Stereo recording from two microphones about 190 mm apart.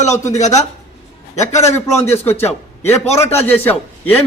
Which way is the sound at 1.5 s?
15° left (ahead or behind).